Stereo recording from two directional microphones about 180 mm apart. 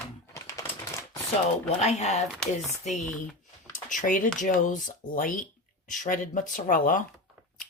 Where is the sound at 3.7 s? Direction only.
45° left (ahead or behind).